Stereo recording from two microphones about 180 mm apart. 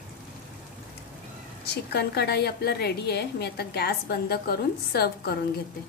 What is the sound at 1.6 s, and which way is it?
A woman's voice, 65° left (ahead or behind).